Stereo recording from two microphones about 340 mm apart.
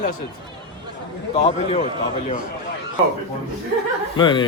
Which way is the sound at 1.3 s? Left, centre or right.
Centre.